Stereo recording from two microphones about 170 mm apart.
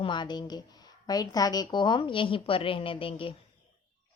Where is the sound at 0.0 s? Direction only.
25° left (ahead or behind).